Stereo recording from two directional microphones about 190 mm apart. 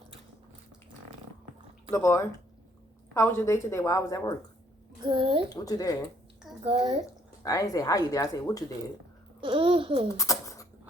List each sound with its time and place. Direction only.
1.9 s a woman's voice: 15° left (ahead or behind)
5.0 s a child's voice: 25° right (ahead or behind)
5.5 s speech: 20° left (ahead or behind)
6.7 s speech: 30° right (ahead or behind)
7.4 s speech: 20° left (ahead or behind)
9.4 s a child's voice: 25° right (ahead or behind)
10.2 s a sound: 15° left (ahead or behind)